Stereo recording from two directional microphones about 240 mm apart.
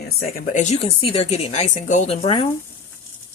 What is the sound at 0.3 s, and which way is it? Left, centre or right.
Speech, left.